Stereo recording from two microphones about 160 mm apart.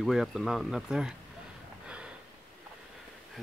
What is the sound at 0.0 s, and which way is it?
Speech, centre (ahead or behind).